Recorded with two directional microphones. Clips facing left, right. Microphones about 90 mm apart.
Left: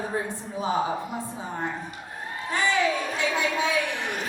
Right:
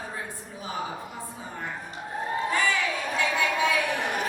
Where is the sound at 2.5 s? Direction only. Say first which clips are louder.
Left 6 dB; 20° left (ahead or behind).